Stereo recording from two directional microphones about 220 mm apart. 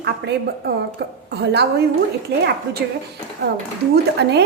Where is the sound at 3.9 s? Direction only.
50° right (ahead or behind).